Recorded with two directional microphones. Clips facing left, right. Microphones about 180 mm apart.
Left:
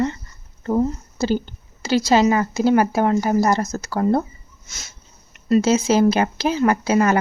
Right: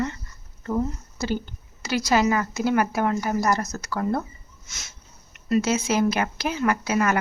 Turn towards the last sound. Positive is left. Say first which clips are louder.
# left 5 dB
turn(degrees=30)  # may be behind; listen again after turning